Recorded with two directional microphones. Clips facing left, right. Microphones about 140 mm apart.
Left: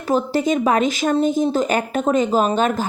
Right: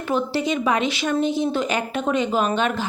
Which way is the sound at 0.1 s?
40° left (ahead or behind).